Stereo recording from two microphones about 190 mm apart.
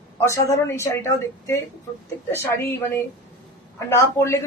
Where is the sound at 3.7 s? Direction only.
15° left (ahead or behind).